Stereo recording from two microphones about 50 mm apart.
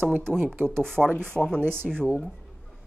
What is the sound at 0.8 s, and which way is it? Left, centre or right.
Speech, centre.